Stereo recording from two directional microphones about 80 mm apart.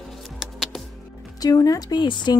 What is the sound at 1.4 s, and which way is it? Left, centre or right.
Speech, left.